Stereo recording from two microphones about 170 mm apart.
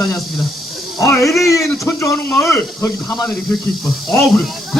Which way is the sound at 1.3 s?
Centre (ahead or behind).